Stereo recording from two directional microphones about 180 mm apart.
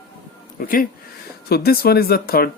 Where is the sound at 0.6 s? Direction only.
50° left (ahead or behind).